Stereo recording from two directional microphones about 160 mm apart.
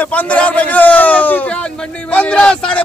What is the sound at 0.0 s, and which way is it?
A man's voice, 10° left (ahead or behind).